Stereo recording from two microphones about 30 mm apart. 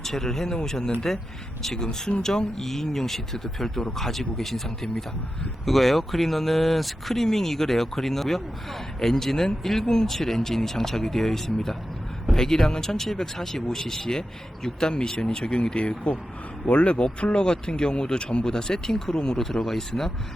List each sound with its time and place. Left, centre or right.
0.0 s speech: centre; by 17.0 s left
17.0 s speech: left; by 19.8 s centre